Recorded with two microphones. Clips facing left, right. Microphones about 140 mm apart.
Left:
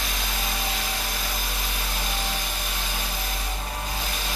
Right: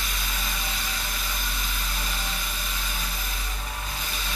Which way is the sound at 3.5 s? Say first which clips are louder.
Left 4 dB; 35° left (ahead or behind).